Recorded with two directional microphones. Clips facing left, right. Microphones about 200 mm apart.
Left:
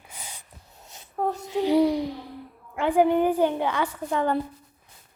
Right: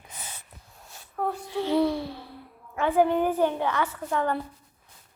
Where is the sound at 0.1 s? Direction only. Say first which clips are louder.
Even; 10° left (ahead or behind).